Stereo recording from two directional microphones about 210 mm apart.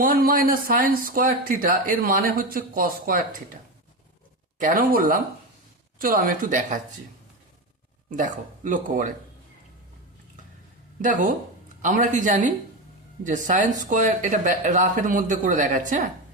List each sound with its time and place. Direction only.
0.0 s speech: 40° right (ahead or behind)
4.6 s speech: 40° right (ahead or behind)
8.1 s speech: 40° right (ahead or behind)
11.0 s speech: 40° right (ahead or behind)